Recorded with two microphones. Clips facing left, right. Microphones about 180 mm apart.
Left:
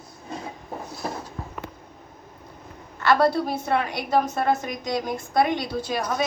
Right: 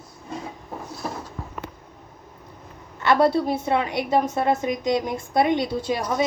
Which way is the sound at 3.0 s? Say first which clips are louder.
Right 1 dB; 25° right (ahead or behind).